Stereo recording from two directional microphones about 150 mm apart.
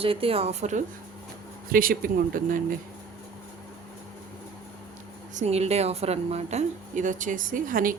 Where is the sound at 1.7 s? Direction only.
70° right (ahead or behind).